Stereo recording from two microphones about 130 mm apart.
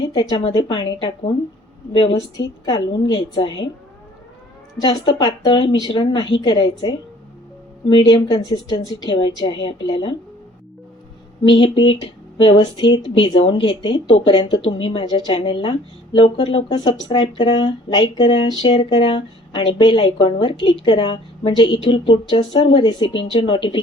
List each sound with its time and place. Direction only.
0.1 s a woman's voice: 30° left (ahead or behind)
0.3 s a woman's voice: 40° left (ahead or behind)
1.9 s a woman's voice: 45° left (ahead or behind)
2.1 s a woman's voice: 25° left (ahead or behind)
2.7 s a woman's voice: 45° left (ahead or behind)
4.8 s a woman's voice: 40° left (ahead or behind)
11.4 s a woman's voice: 40° left (ahead or behind)
16.6 s a woman's voice: 35° left (ahead or behind)
22.8 s a woman's voice: 30° left (ahead or behind)
23.0 s a woman's voice: 45° left (ahead or behind)